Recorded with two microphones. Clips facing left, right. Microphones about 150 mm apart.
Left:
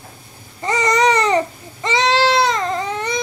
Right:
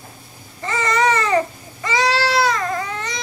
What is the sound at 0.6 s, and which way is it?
Babbling, 20° left (ahead or behind).